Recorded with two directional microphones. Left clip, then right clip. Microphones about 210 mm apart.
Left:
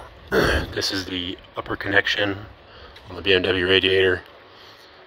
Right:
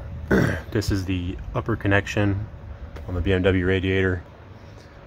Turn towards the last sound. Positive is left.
turn(degrees=25)  # may be behind; listen again after turning